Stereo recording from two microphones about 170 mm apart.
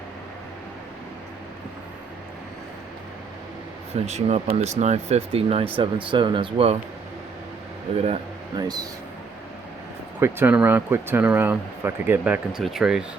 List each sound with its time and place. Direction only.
4.0 s speech: 40° right (ahead or behind)
8.5 s speech: 25° right (ahead or behind)
10.2 s speech: 15° right (ahead or behind)